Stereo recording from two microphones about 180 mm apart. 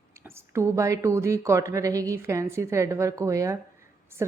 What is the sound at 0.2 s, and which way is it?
A woman's voice, 15° right (ahead or behind).